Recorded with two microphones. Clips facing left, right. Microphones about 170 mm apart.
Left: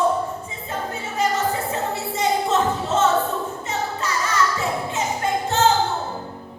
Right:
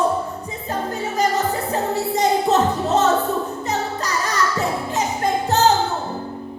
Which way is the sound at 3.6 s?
40° right (ahead or behind).